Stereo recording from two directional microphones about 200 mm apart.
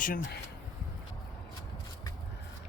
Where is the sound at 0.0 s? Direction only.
45° left (ahead or behind).